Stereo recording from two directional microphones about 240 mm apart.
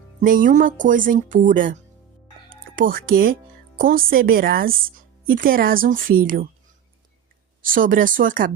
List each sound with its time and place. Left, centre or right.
0.2 s speech: right
7.6 s speech: right